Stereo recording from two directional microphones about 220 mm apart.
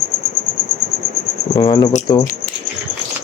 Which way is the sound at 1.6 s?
20° left (ahead or behind).